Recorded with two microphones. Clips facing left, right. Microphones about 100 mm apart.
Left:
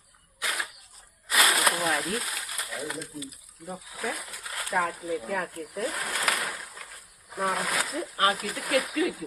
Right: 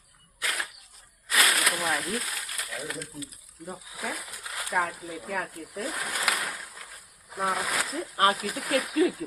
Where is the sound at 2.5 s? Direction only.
20° left (ahead or behind).